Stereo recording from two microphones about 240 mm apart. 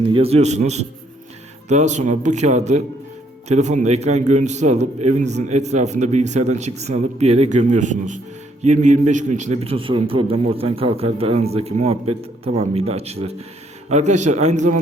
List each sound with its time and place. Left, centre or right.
0.0 s a man's voice: right